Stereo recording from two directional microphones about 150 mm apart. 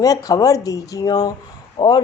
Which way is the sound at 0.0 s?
25° left (ahead or behind).